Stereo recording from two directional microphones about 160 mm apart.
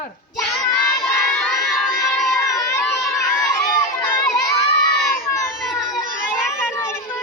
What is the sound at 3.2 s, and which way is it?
Crowd, 20° left (ahead or behind).